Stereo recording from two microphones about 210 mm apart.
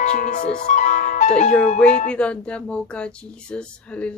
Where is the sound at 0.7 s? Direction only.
35° left (ahead or behind).